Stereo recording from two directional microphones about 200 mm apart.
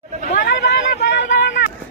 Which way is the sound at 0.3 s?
55° left (ahead or behind).